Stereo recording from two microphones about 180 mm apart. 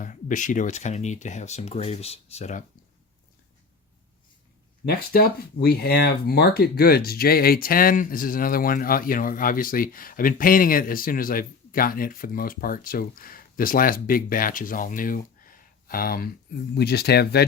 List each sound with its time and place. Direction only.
0.0 s speech: 45° left (ahead or behind)
4.9 s speech: 55° left (ahead or behind)